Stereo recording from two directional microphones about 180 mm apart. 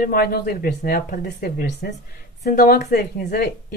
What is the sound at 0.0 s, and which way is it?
A woman's voice, 55° left (ahead or behind).